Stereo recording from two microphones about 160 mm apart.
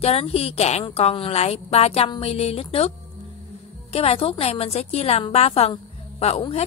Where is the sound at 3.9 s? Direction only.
40° left (ahead or behind).